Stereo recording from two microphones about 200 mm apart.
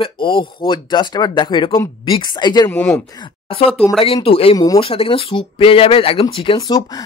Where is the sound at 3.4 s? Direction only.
30° left (ahead or behind).